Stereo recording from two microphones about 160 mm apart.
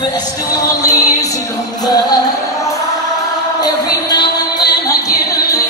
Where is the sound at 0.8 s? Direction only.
20° left (ahead or behind).